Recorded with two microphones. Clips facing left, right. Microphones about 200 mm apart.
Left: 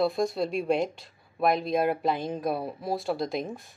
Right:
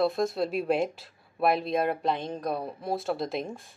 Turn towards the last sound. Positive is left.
turn(degrees=0)  # may be behind; listen again after turning